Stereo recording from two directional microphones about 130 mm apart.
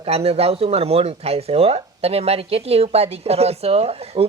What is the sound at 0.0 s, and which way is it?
A man's voice, 50° right (ahead or behind).